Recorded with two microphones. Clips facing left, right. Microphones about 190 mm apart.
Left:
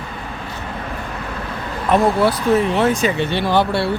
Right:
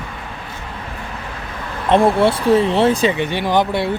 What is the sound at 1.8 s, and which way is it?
Speech, 25° right (ahead or behind).